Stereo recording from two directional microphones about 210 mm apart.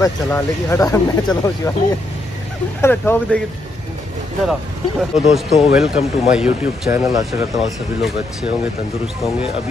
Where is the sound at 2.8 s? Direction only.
10° left (ahead or behind).